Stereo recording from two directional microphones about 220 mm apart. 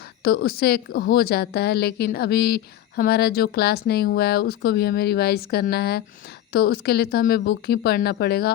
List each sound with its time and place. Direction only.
0.3 s a woman's voice: 45° left (ahead or behind)